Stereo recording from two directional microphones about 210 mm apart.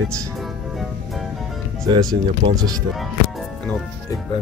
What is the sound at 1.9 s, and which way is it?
Speech, 20° right (ahead or behind).